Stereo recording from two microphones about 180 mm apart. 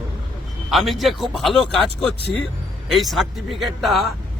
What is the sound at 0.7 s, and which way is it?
A man's voice, centre (ahead or behind).